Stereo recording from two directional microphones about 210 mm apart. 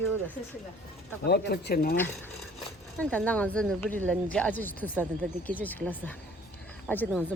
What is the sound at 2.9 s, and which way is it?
Speech, 5° left (ahead or behind).